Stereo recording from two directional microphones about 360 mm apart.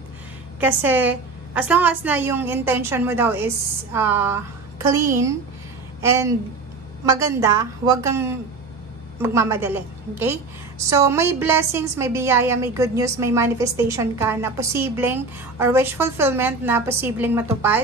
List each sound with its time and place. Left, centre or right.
0.6 s a woman's voice: centre